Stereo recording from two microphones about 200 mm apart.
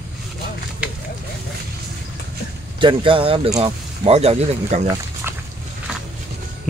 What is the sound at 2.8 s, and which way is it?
Speech, 25° right (ahead or behind).